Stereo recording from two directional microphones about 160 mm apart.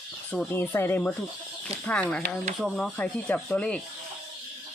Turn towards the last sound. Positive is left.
turn(degrees=5)  # may be behind; listen again after turning